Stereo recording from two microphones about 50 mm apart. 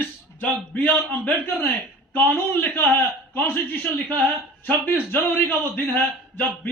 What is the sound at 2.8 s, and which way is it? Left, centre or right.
A man's voice, left.